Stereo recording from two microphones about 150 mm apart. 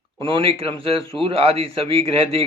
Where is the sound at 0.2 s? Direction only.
35° right (ahead or behind).